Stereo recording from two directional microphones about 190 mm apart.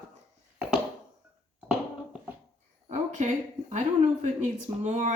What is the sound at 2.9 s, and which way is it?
A woman's voice, 40° right (ahead or behind).